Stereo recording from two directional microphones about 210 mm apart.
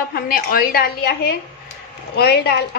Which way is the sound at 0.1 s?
45° left (ahead or behind).